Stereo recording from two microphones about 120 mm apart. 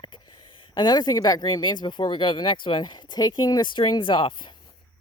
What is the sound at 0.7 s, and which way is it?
Speech, 35° left (ahead or behind).